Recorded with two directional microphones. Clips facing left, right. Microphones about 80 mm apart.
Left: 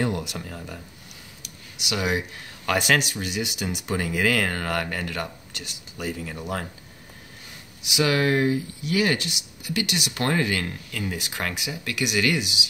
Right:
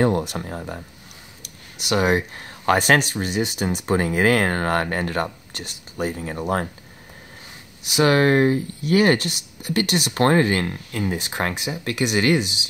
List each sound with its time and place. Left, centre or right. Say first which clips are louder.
0.0 s speech: right 7 dB; right
7.8 s speech: right 5 dB; right